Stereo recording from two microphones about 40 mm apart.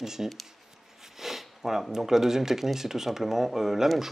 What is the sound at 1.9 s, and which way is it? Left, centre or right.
Speech, centre.